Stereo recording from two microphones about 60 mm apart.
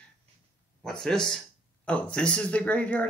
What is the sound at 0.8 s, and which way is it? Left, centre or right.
Speech, centre.